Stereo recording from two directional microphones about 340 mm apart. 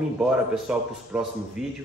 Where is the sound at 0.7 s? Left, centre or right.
Centre.